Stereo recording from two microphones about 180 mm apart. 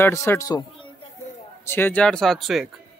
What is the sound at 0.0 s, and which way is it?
Speech, 15° left (ahead or behind).